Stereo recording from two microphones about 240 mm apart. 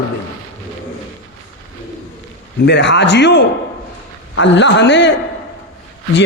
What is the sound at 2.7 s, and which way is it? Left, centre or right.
A man's voice, left.